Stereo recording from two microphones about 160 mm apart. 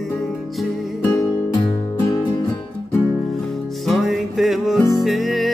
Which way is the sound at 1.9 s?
20° left (ahead or behind).